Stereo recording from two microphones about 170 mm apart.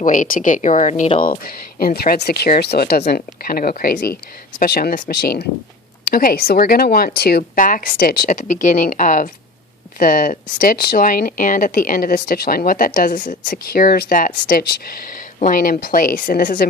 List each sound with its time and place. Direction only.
0.0 s speech: 50° left (ahead or behind)
1.2 s speech: 55° left (ahead or behind)
13.5 s speech: 60° left (ahead or behind)